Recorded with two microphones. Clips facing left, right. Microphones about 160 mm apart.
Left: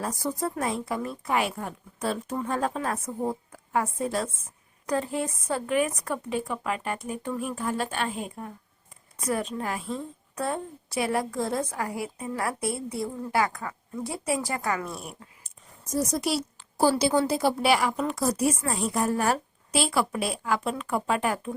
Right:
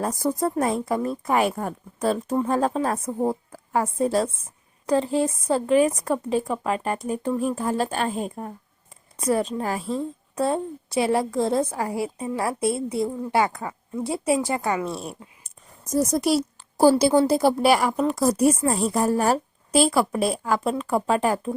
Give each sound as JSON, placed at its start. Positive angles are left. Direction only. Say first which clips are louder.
{"t": 0.0, "sound": "a woman's voice", "louder": "right 6 dB", "side_deg": -45}
{"t": 15.9, "sound": "a woman's voice", "louder": "right 6 dB", "side_deg": -40}